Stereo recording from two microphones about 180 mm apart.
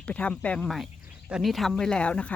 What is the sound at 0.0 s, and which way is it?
Speech, 5° left (ahead or behind).